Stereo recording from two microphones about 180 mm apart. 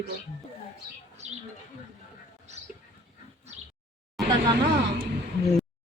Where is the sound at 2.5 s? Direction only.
40° right (ahead or behind).